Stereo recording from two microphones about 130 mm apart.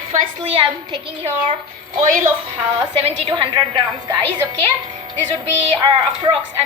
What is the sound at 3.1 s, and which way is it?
Speech, 40° right (ahead or behind).